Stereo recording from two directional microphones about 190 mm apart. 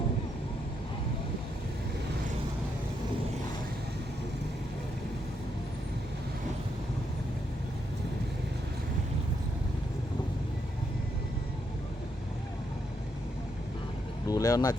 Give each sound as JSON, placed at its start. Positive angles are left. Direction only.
{"t": 14.3, "sound": "speech", "side_deg": 20}